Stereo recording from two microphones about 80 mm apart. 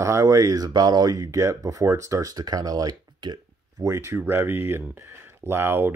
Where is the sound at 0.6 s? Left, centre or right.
Right.